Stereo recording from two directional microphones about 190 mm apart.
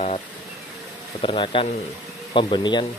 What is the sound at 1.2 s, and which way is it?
Speech, 30° left (ahead or behind).